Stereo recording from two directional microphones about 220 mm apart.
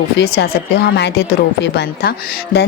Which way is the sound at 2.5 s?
40° left (ahead or behind).